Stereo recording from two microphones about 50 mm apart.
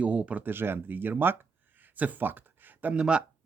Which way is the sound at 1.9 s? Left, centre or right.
Right.